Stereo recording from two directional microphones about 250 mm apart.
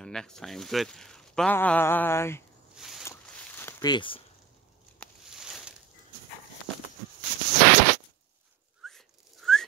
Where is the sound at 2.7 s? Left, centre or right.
Centre.